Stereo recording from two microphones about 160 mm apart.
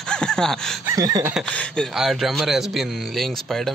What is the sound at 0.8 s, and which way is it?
Speech, 20° right (ahead or behind).